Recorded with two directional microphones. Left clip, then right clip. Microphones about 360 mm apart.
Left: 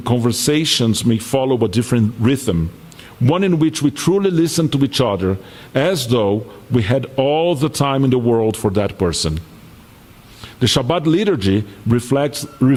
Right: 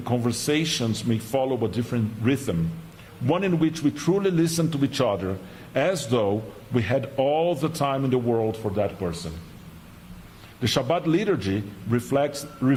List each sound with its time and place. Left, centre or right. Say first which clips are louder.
0.0 s a man's voice: left 8 dB; left
10.6 s a man's voice: left 7 dB; left